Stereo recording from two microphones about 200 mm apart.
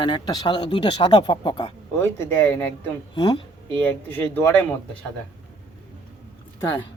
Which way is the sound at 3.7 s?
10° left (ahead or behind).